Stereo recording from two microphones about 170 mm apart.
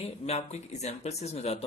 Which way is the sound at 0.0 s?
40° left (ahead or behind).